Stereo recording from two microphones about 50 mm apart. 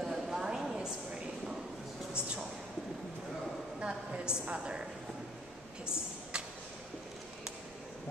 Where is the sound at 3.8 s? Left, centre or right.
Centre.